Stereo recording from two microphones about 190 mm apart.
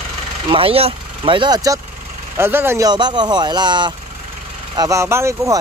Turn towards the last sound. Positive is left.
turn(degrees=-15)  # may be behind; listen again after turning